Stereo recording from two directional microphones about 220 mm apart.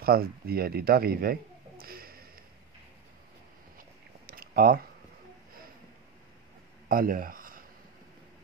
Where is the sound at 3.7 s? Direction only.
40° right (ahead or behind).